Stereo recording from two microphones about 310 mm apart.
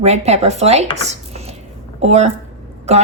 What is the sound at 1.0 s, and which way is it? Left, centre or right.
Dishes, right.